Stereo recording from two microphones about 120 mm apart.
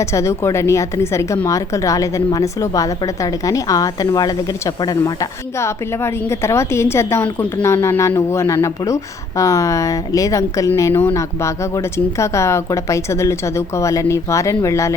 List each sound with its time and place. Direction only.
0.0 s a woman's voice: 25° left (ahead or behind)